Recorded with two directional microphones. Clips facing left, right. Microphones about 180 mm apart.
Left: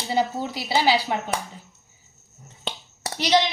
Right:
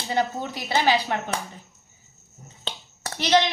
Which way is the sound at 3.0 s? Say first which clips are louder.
Even; 15° left (ahead or behind).